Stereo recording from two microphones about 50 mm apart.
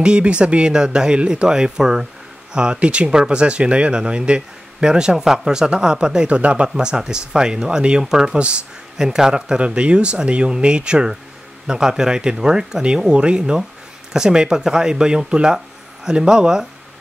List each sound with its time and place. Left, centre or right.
0.0 s speech: right